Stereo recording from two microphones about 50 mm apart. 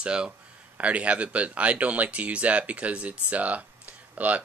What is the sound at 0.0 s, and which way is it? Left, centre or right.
Speech, centre.